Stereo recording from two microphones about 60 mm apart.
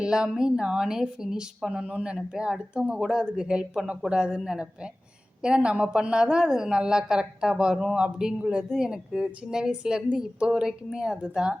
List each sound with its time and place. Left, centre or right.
0.0 s a woman's voice: centre